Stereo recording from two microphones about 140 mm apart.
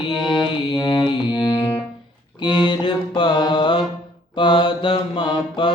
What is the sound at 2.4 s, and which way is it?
Mantra, 35° left (ahead or behind).